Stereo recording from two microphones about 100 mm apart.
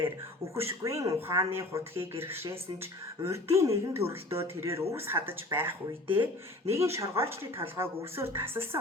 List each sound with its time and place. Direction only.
0.5 s speech: 25° right (ahead or behind)